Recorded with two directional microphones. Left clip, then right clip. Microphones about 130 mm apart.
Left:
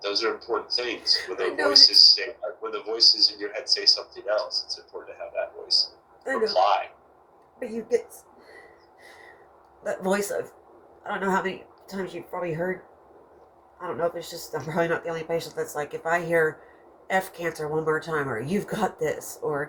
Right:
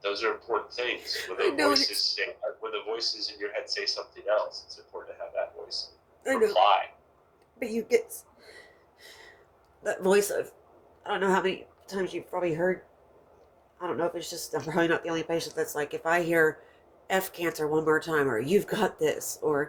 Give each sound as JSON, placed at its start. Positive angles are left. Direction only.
{"t": 0.0, "sound": "a man's voice", "side_deg": -30}
{"t": 1.0, "sound": "speech", "side_deg": -90}
{"t": 1.9, "sound": "a man's voice", "side_deg": -30}
{"t": 6.5, "sound": "a man's voice", "side_deg": -30}
{"t": 7.7, "sound": "speech", "side_deg": -90}
{"t": 9.9, "sound": "speech", "side_deg": -85}
{"t": 13.7, "sound": "speech", "side_deg": -75}